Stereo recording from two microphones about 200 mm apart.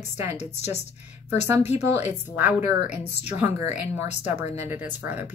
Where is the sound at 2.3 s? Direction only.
10° right (ahead or behind).